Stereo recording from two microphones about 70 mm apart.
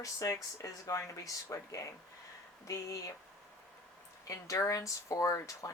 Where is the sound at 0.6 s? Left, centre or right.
Left.